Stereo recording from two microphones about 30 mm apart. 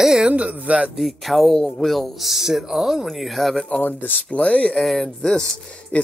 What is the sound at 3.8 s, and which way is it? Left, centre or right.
Speech, left.